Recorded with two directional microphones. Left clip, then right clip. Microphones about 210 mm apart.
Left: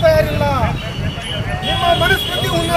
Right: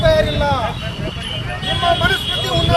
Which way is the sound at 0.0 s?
20° right (ahead or behind).